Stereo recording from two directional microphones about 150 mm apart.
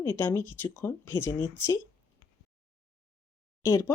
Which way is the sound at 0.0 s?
15° left (ahead or behind).